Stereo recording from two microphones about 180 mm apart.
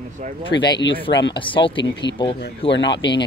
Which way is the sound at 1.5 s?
30° left (ahead or behind).